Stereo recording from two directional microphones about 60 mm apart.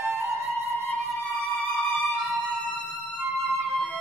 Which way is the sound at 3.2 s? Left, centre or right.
Right.